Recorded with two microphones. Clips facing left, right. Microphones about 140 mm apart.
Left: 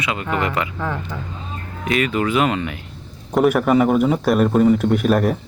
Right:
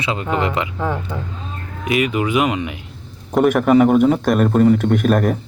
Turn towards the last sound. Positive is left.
turn(degrees=0)  # may be behind; listen again after turning